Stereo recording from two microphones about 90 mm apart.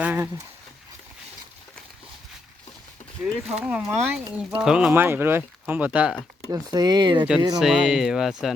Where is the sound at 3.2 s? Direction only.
10° right (ahead or behind).